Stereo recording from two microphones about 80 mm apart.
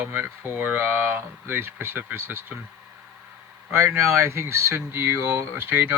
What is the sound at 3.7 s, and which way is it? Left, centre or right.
Speech, right.